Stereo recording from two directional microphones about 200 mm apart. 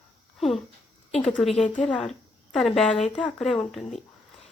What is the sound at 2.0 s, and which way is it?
Speech, centre (ahead or behind).